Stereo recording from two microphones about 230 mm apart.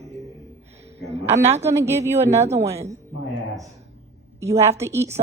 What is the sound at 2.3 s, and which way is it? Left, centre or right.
Speech, right.